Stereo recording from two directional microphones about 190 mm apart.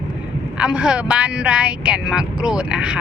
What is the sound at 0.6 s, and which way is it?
Speech, 5° right (ahead or behind).